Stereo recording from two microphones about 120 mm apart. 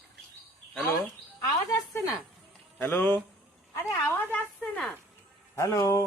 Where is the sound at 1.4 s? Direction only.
30° left (ahead or behind).